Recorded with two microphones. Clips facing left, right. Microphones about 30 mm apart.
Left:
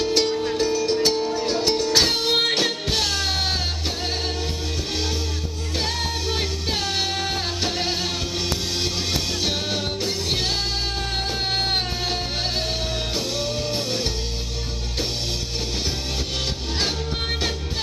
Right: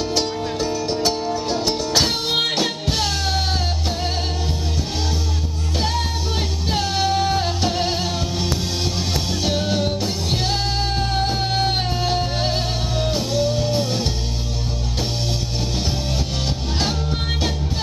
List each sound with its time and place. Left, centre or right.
0.0 s music: centre
6.7 s music: centre
9.4 s music: centre
11.5 s music: centre